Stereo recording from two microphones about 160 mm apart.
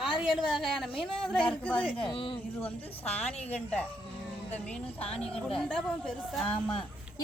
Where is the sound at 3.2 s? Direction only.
40° left (ahead or behind).